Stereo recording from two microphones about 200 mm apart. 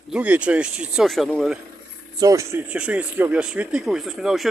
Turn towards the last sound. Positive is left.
turn(degrees=0)  # may be behind; listen again after turning